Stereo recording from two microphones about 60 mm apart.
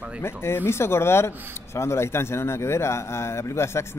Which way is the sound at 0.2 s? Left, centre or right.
Left.